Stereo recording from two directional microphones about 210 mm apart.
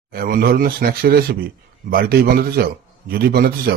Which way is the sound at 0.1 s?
45° right (ahead or behind).